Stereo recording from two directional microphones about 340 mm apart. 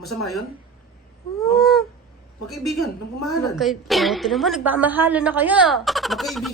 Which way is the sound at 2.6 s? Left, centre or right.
Centre.